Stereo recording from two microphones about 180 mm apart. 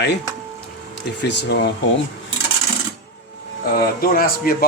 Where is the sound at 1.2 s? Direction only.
75° left (ahead or behind).